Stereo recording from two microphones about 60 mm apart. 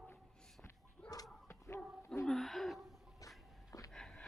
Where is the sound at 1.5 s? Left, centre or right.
Left.